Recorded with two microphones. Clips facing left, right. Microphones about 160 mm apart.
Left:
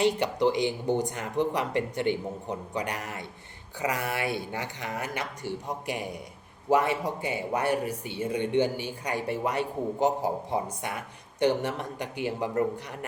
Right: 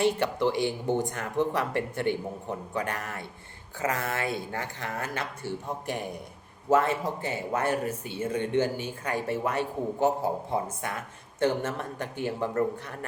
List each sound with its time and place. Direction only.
0.0 s speech: 15° left (ahead or behind)